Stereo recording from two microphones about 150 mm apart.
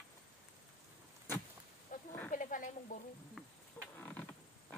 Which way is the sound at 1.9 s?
60° left (ahead or behind).